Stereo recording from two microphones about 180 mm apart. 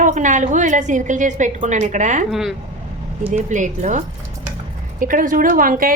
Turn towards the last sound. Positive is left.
turn(degrees=-50)  # may be behind; listen again after turning